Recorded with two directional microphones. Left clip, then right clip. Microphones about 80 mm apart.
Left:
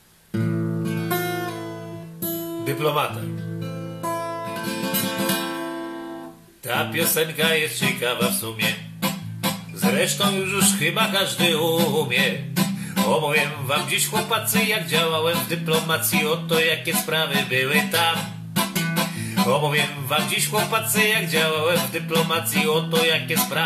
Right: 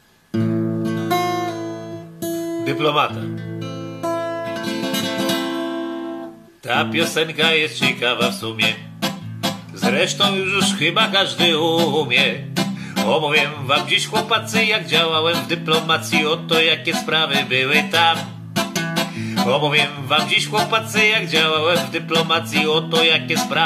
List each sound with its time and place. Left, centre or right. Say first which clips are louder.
0.3 s guitar: right 5 dB; right
2.6 s speech: right 4 dB; right
4.2 s music: right 4 dB; right
6.7 s music: right 4 dB; right
9.0 s music: right 3 dB; right
9.8 s music: right 4 dB; right
12.5 s music: right 2 dB; right
13.1 s music: right 4 dB; right